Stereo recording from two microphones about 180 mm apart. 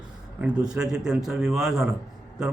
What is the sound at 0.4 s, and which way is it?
Speech, 5° right (ahead or behind).